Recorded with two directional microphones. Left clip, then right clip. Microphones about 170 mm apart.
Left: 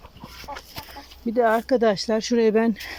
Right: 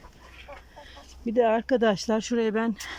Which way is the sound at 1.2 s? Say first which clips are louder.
Left 3 dB; 10° right (ahead or behind).